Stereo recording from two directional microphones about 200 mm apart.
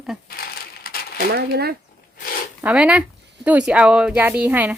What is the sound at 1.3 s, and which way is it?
Speech, 50° right (ahead or behind).